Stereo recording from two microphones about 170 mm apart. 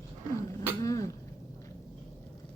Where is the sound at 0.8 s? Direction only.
20° left (ahead or behind).